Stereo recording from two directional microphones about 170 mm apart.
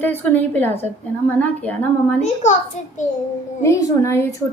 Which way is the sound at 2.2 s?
45° left (ahead or behind).